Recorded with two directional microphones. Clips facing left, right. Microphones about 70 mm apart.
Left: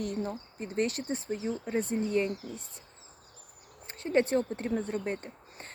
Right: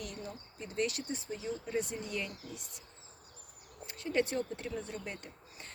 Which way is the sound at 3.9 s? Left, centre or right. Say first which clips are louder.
Left 6 dB; left.